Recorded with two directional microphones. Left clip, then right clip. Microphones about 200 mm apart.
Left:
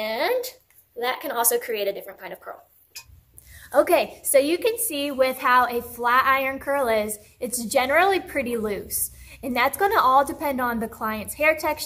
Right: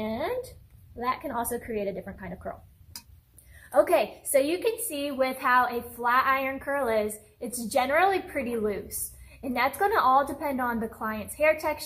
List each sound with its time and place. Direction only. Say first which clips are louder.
0.0 s a sound: left 6 dB; 35° left (ahead or behind)
0.9 s a woman's voice: left 4 dB; 35° left (ahead or behind)
3.7 s a woman's voice: left 3 dB; 35° left (ahead or behind)